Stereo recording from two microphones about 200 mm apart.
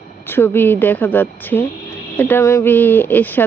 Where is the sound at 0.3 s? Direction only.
10° left (ahead or behind).